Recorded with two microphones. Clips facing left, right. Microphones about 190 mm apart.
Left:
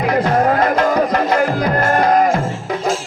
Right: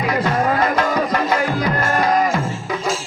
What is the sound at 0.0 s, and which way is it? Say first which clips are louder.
Music: left 4 dB; 55° left (ahead or behind).